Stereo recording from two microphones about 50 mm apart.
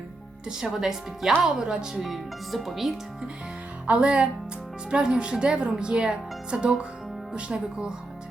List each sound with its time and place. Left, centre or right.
0.4 s speech: centre
2.0 s speech: centre
3.8 s speech: right